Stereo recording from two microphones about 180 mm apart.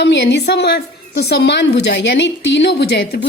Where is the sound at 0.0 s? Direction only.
70° left (ahead or behind).